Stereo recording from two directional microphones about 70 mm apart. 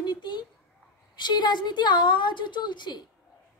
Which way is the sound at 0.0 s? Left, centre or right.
Left.